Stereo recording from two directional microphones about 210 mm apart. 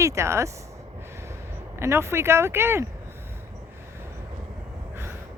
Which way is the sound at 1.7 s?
10° right (ahead or behind).